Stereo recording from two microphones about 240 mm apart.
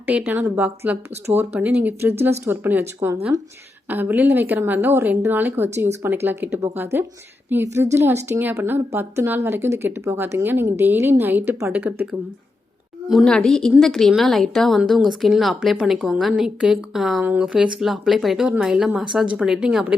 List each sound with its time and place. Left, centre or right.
0.0 s a woman's voice: centre
13.1 s a woman's voice: centre